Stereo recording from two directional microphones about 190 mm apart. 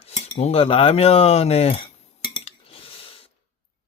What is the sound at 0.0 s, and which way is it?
Cutlery, 30° left (ahead or behind).